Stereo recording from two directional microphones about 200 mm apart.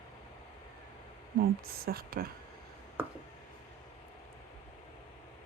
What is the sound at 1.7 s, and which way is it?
Speech, 50° right (ahead or behind).